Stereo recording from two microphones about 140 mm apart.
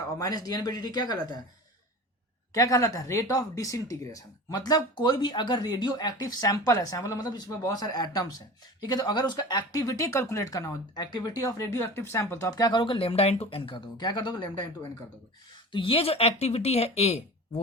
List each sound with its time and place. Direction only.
0.2 s speech: 25° left (ahead or behind)
2.5 s speech: 25° left (ahead or behind)
15.7 s speech: 40° left (ahead or behind)